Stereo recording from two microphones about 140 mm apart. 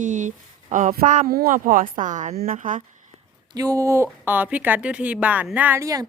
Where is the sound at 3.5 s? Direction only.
25° right (ahead or behind).